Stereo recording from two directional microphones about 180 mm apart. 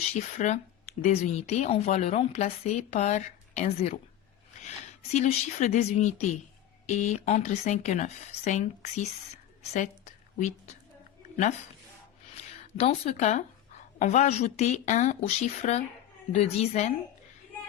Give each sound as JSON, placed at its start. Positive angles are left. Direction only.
{"t": 0.0, "sound": "speech", "side_deg": 40}
{"t": 5.1, "sound": "speech", "side_deg": 40}
{"t": 12.4, "sound": "speech", "side_deg": 35}